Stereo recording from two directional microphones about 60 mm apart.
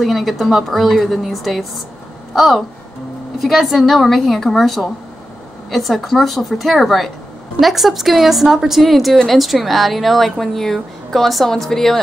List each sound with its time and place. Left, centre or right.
0.0 s a woman's voice: centre